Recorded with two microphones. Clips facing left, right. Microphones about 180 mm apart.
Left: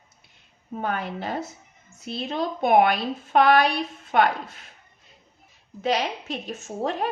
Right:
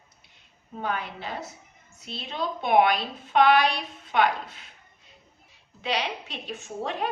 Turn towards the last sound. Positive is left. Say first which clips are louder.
# left 3 dB
turn(degrees=45)  # may be behind; listen again after turning